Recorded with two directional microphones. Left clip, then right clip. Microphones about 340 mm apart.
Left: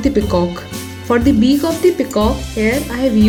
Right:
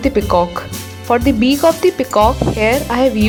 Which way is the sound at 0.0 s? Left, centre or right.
Centre.